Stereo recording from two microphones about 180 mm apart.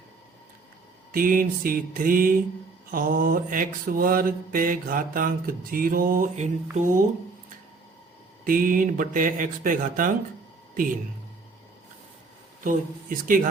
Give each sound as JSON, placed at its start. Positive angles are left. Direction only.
{"t": 1.1, "sound": "mantra", "side_deg": -50}
{"t": 8.4, "sound": "mantra", "side_deg": -50}
{"t": 12.6, "sound": "mantra", "side_deg": -50}